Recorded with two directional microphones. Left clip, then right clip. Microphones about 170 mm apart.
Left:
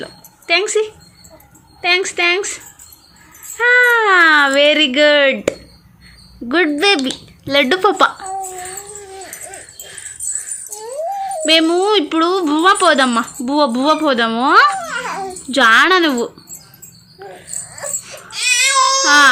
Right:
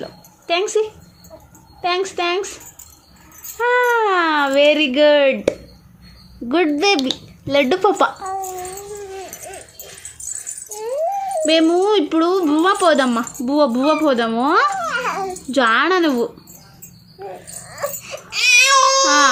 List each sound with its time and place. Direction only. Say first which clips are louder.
0.0 s a sound: left 1 dB; 5° left (ahead or behind)
1.8 s speech: left 5 dB; 5° left (ahead or behind)
3.6 s speech: left 4 dB; centre (ahead or behind)
11.4 s a child's voice: left 2 dB; centre (ahead or behind)
17.2 s a sound: left 1 dB; centre (ahead or behind)
18.3 s baby cry: right 2 dB; centre (ahead or behind)
19.0 s speech: left 4 dB; centre (ahead or behind)